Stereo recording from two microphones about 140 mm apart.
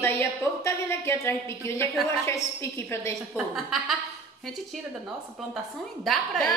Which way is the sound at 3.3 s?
Centre (ahead or behind).